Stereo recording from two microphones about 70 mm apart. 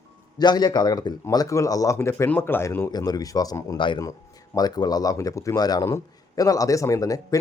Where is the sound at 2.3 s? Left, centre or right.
Left.